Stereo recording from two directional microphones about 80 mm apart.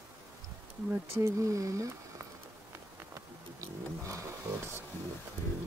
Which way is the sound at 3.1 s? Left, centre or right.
Right.